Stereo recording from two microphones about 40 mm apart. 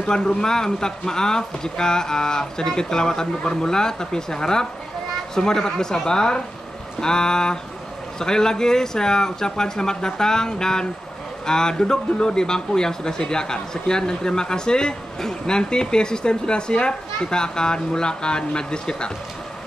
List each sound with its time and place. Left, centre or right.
0.1 s speech: centre